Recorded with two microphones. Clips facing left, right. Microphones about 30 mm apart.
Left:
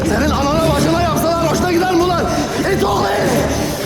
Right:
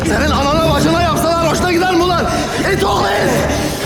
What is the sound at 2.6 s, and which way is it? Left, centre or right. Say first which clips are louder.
Speech: right 2 dB; right.